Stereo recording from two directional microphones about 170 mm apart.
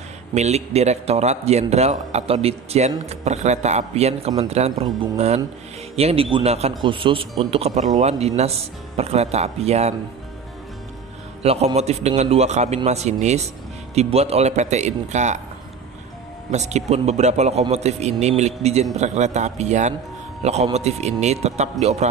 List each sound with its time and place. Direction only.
0.3 s speech: 40° right (ahead or behind)
11.4 s speech: 40° right (ahead or behind)
16.4 s speech: 40° right (ahead or behind)